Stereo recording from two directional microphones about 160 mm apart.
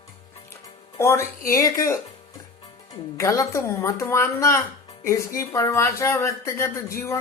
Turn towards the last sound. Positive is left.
turn(degrees=20)  # may be behind; listen again after turning